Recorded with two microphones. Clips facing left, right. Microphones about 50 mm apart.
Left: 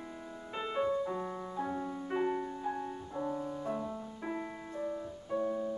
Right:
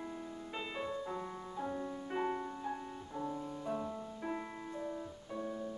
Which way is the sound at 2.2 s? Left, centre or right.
Centre.